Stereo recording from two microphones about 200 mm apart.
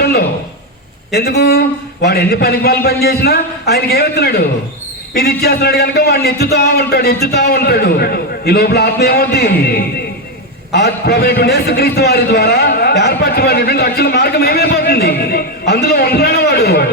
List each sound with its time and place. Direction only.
1.1 s a man's voice: 50° left (ahead or behind)